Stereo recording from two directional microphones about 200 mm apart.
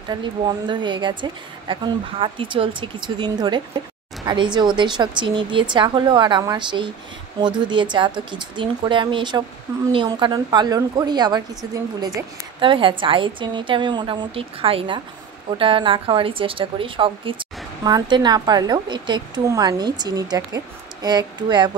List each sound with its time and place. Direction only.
0.1 s a woman's voice: 20° right (ahead or behind)